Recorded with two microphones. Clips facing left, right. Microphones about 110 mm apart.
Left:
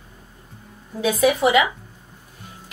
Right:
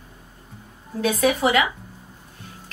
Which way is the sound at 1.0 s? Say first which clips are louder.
Left 2 dB; 5° left (ahead or behind).